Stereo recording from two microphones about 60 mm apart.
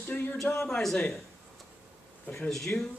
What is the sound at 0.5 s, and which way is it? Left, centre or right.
Speech, centre.